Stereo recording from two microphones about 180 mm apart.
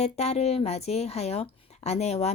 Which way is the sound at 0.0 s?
35° left (ahead or behind).